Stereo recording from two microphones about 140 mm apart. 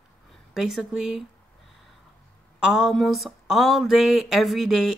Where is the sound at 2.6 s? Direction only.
5° right (ahead or behind).